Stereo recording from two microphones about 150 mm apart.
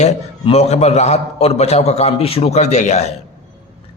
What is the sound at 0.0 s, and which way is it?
A man's voice, 45° left (ahead or behind).